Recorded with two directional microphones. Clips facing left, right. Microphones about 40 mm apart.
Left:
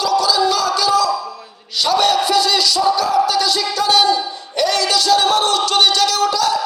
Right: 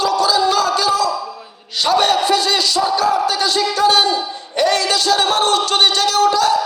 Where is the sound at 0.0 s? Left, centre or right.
Right.